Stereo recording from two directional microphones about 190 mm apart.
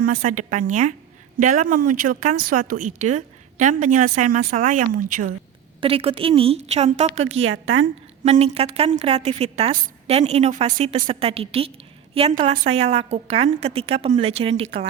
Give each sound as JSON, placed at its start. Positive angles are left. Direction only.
{"t": 0.0, "sound": "a woman's voice", "side_deg": -45}
{"t": 5.8, "sound": "a woman's voice", "side_deg": -30}
{"t": 7.4, "sound": "a woman's voice", "side_deg": -90}
{"t": 8.2, "sound": "a woman's voice", "side_deg": -35}